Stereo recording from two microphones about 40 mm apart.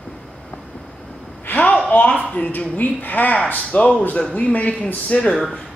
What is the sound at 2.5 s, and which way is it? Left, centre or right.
Speech, left.